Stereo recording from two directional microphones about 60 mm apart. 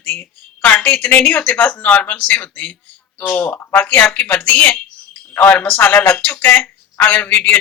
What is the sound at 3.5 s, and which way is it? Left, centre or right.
A woman's voice, left.